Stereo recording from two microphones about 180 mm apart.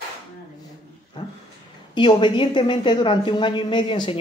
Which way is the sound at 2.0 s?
25° left (ahead or behind).